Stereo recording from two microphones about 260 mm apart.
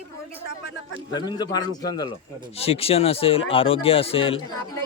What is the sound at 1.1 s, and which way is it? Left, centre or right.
A man's voice, centre.